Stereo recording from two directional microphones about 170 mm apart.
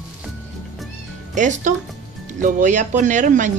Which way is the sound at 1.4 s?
45° right (ahead or behind).